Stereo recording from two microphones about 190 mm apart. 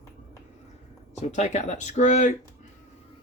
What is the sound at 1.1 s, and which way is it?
Speech, 35° left (ahead or behind).